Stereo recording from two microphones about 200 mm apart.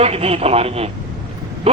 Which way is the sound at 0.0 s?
30° right (ahead or behind).